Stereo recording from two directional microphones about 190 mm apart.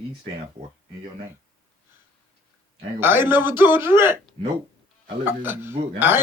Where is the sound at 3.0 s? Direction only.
10° right (ahead or behind).